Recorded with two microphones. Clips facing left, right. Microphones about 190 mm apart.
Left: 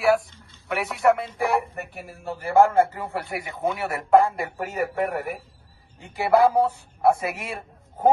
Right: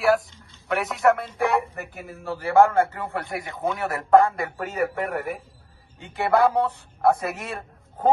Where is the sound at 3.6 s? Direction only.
15° left (ahead or behind).